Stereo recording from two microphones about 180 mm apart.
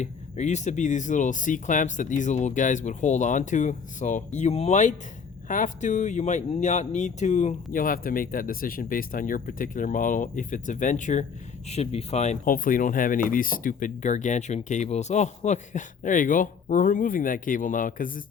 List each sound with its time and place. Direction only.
0.0 s speech: 40° left (ahead or behind)